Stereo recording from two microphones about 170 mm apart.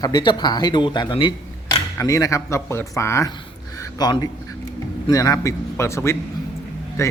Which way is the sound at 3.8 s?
25° left (ahead or behind).